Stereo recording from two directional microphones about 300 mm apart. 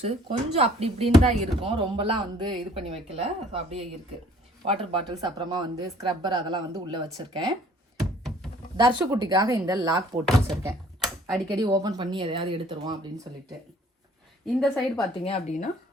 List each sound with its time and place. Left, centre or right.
0.0 s speech: centre
8.7 s speech: centre
10.4 s a sound: centre
11.5 s speech: centre
14.4 s a woman's voice: centre
15.2 s speech: left